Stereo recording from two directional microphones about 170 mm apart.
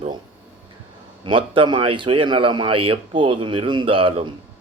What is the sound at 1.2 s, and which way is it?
A man's voice, 30° right (ahead or behind).